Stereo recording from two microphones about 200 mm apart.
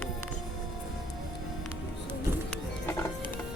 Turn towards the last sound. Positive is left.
turn(degrees=15)  # may be behind; listen again after turning